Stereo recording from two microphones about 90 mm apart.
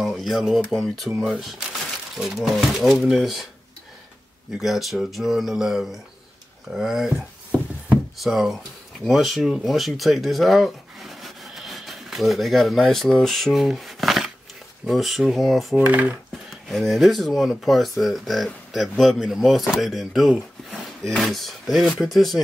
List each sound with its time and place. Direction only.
0.0 s speech: centre (ahead or behind)
4.6 s speech: centre (ahead or behind)
15.7 s speech: 20° right (ahead or behind)
16.6 s speech: centre (ahead or behind)
20.7 s a sound: 15° left (ahead or behind)
21.2 s speech: centre (ahead or behind)